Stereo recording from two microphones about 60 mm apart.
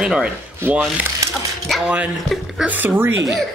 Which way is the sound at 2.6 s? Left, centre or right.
Right.